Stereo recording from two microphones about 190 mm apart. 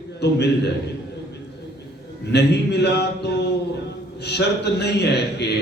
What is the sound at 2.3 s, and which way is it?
A man's voice, 60° left (ahead or behind).